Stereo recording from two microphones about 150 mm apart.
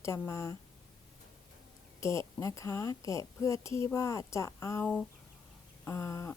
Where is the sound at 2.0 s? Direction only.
20° left (ahead or behind).